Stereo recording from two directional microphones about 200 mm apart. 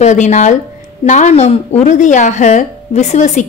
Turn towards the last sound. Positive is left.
turn(degrees=35)  # may be behind; listen again after turning